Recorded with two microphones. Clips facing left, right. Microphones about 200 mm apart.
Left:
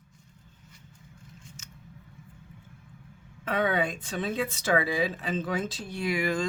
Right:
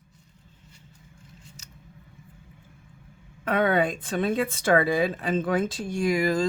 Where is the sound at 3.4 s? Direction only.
55° right (ahead or behind).